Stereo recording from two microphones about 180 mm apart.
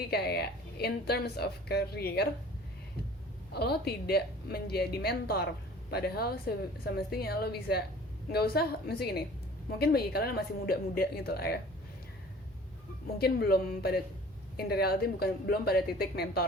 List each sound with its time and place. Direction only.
0.1 s a woman's voice: 60° left (ahead or behind)
3.5 s a woman's voice: 65° left (ahead or behind)
13.1 s a woman's voice: 60° left (ahead or behind)